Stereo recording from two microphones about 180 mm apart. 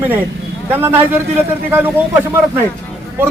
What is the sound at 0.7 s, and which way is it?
Speech, 10° right (ahead or behind).